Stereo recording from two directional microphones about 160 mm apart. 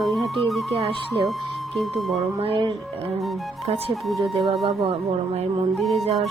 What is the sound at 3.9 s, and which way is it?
Speech, centre (ahead or behind).